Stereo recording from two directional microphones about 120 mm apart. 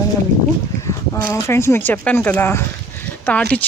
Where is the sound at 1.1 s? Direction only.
25° left (ahead or behind).